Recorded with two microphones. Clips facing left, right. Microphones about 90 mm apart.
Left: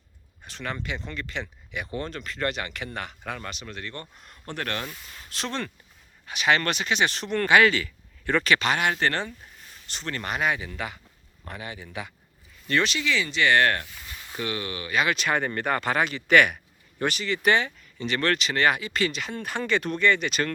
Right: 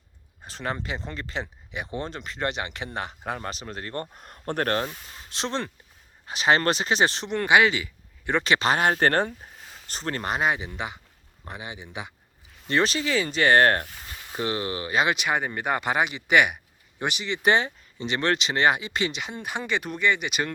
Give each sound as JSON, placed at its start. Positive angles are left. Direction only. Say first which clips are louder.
{"t": 0.4, "sound": "speech", "louder": "right 2 dB", "side_deg": -30}
{"t": 4.9, "sound": "speech", "louder": "right 1 dB", "side_deg": -25}
{"t": 12.6, "sound": "speech", "louder": "right 1 dB", "side_deg": -30}
{"t": 15.1, "sound": "speech", "louder": "even", "side_deg": -15}